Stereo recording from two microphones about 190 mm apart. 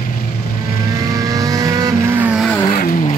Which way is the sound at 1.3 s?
20° right (ahead or behind).